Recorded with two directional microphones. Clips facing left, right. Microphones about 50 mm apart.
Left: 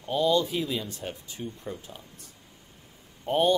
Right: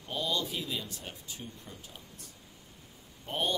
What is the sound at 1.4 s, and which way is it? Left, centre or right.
Speech, left.